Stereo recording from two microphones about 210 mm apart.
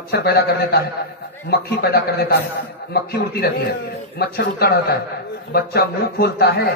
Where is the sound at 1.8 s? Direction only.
50° left (ahead or behind).